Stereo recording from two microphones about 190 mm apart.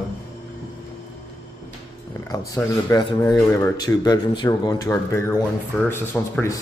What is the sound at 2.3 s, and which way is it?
Speech, 20° left (ahead or behind).